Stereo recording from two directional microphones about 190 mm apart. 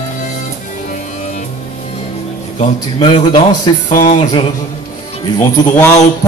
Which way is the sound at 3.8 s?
40° left (ahead or behind).